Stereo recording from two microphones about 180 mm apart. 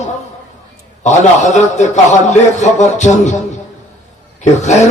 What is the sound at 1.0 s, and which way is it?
A man's voice, 40° left (ahead or behind).